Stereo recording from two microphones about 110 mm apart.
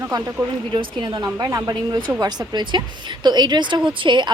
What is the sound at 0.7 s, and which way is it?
A woman's voice, 40° right (ahead or behind).